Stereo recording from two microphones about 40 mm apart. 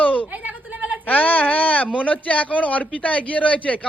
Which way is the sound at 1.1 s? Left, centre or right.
Left.